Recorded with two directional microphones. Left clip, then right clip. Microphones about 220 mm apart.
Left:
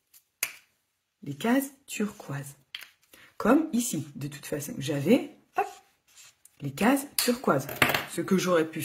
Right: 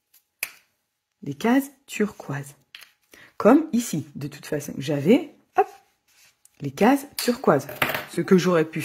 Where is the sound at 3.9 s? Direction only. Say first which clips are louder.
Right 4 dB; 25° right (ahead or behind).